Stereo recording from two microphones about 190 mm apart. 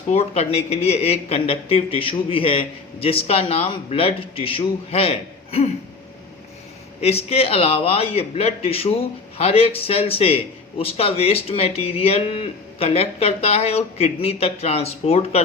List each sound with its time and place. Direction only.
0.1 s a man's voice: 35° left (ahead or behind)
7.0 s a man's voice: 30° left (ahead or behind)